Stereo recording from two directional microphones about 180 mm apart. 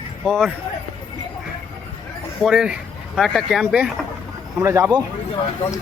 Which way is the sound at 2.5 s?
5° right (ahead or behind).